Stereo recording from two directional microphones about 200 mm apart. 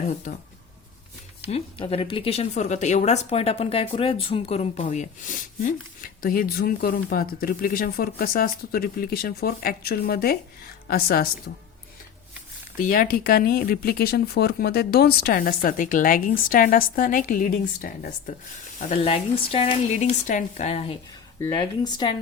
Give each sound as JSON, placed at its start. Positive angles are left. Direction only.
{"t": 0.3, "sound": "speech", "side_deg": 40}
{"t": 1.5, "sound": "speech", "side_deg": 30}
{"t": 12.7, "sound": "speech", "side_deg": 45}
{"t": 18.8, "sound": "speech", "side_deg": 35}